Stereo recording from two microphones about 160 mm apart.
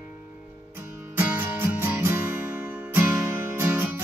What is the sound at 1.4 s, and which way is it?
Music, 15° right (ahead or behind).